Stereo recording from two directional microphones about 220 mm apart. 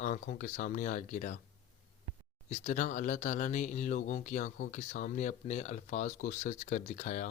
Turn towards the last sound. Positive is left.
turn(degrees=35)  # may be behind; listen again after turning